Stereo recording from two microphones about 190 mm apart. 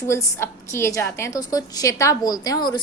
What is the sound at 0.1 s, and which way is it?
A woman's voice, 15° left (ahead or behind).